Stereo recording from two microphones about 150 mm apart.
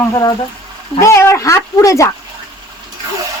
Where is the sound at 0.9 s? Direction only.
20° left (ahead or behind).